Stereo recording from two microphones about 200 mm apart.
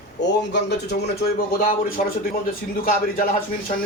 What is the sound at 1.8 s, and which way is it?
Speech, 45° left (ahead or behind).